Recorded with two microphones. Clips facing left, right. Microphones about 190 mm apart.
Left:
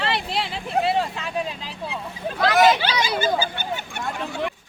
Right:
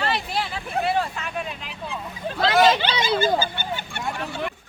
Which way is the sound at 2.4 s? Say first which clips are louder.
Left 1 dB; 25° right (ahead or behind).